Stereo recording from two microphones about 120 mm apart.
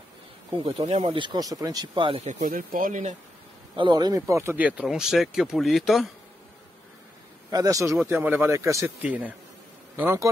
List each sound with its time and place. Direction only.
0.7 s speech: 60° right (ahead or behind)
1.1 s speech: 40° right (ahead or behind)
2.2 s speech: 90° right
3.7 s speech: 40° right (ahead or behind)
4.6 s speech: 10° right (ahead or behind)
7.5 s speech: 30° right (ahead or behind)
9.0 s speech: 15° right (ahead or behind)